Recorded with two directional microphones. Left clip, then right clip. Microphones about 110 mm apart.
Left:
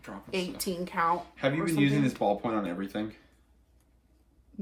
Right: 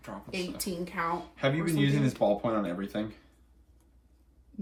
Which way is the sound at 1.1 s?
15° right (ahead or behind).